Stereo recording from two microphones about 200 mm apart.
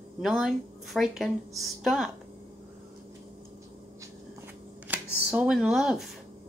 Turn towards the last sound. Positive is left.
turn(degrees=0)  # may be behind; listen again after turning